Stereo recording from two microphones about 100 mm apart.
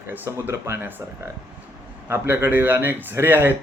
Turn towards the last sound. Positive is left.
turn(degrees=-20)  # may be behind; listen again after turning